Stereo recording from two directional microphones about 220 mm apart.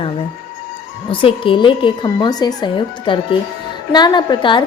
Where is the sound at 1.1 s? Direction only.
25° left (ahead or behind).